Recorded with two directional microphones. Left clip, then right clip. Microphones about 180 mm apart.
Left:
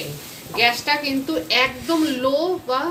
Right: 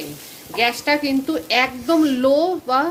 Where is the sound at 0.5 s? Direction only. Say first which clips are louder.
Even; 65° right (ahead or behind).